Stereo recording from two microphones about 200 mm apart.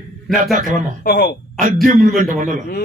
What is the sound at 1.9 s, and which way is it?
Speech, 40° right (ahead or behind).